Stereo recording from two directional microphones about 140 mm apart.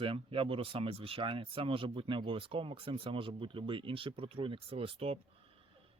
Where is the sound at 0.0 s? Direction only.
40° right (ahead or behind).